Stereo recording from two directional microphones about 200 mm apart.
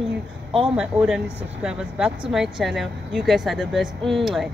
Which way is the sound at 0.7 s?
5° right (ahead or behind).